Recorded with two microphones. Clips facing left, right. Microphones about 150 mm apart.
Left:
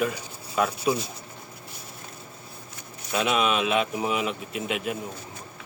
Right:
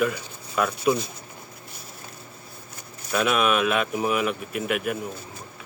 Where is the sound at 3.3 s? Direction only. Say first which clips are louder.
Right 1 dB; 55° right (ahead or behind).